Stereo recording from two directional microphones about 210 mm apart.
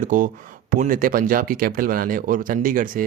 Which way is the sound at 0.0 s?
40° right (ahead or behind).